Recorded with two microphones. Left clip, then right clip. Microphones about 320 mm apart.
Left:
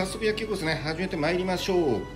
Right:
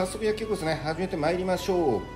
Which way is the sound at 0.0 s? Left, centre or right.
Centre.